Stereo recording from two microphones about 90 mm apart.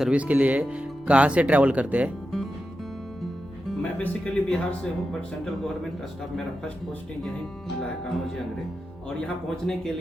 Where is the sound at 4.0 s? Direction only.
20° left (ahead or behind).